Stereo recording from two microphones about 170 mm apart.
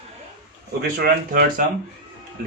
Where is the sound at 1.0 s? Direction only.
60° right (ahead or behind).